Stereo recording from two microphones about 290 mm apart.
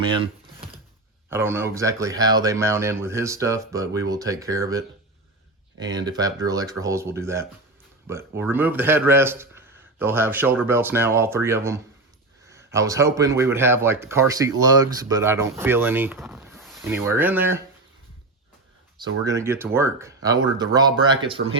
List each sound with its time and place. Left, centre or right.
0.2 s typing: centre
1.3 s speech: centre
5.8 s speech: centre
18.9 s speech: centre